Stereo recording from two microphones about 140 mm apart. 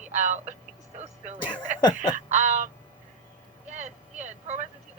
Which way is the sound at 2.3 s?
60° right (ahead or behind).